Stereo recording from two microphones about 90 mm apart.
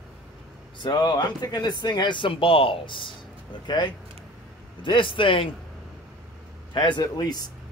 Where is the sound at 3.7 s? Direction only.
55° left (ahead or behind).